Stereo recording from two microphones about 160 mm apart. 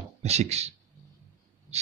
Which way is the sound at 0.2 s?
40° right (ahead or behind).